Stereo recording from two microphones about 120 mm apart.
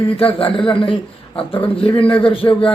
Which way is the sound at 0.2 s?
50° left (ahead or behind).